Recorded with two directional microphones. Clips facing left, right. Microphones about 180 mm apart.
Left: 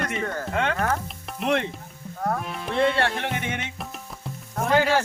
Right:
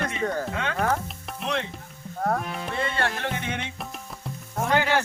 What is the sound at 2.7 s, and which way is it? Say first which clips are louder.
Music: left 7 dB; 75° left (ahead or behind).